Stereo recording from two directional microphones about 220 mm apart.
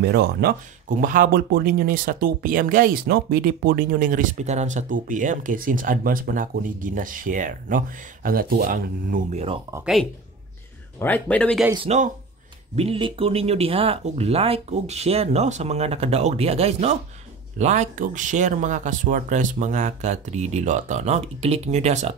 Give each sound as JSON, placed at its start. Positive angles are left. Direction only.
{"t": 0.0, "sound": "speech", "side_deg": -45}
{"t": 11.0, "sound": "speech", "side_deg": 10}
{"t": 11.7, "sound": "speech", "side_deg": -30}